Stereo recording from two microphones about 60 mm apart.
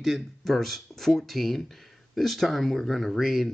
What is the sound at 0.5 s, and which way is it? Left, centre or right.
A man's voice, centre.